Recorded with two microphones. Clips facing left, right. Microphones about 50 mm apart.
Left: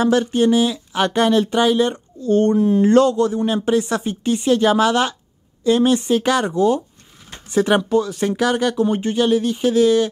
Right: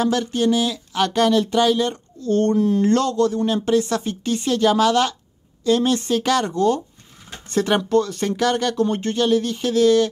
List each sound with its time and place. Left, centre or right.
0.0 s speech: centre